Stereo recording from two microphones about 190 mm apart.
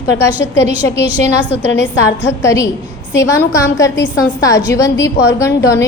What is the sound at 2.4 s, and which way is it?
A woman's voice, 15° left (ahead or behind).